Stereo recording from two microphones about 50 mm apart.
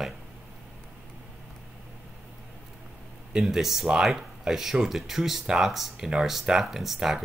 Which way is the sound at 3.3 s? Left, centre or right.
Centre.